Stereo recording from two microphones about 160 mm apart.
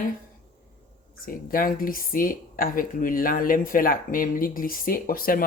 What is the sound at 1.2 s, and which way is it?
Speech, 65° left (ahead or behind).